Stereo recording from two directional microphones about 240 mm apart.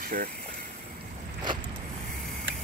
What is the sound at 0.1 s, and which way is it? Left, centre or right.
Speech, right.